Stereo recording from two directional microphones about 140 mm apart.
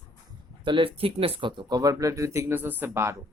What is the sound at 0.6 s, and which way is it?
Speech, 35° right (ahead or behind).